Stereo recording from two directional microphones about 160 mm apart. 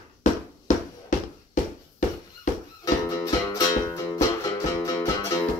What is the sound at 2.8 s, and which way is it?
Music, 20° left (ahead or behind).